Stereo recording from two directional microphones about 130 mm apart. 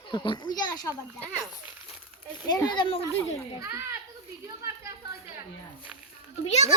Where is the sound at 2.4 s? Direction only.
35° left (ahead or behind).